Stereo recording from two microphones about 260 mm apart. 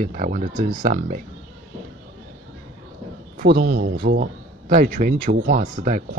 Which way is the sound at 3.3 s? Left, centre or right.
Right.